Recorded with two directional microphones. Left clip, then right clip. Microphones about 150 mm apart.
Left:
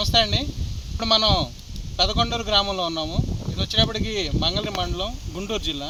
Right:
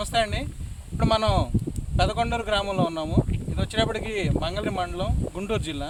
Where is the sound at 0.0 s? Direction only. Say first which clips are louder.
Left 5 dB; 20° right (ahead or behind).